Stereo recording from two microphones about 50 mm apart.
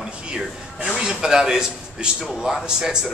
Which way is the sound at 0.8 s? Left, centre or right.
Centre.